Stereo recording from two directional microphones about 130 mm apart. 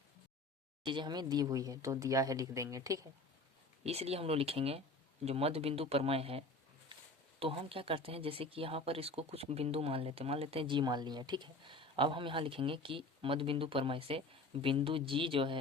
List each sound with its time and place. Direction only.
0.9 s speech: 35° right (ahead or behind)
3.8 s speech: 50° right (ahead or behind)